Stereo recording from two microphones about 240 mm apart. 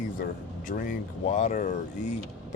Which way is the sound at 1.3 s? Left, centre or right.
Left.